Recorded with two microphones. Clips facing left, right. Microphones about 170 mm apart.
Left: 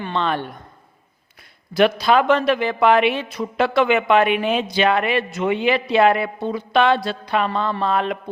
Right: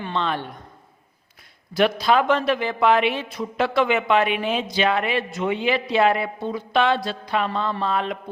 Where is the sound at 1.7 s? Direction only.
70° left (ahead or behind).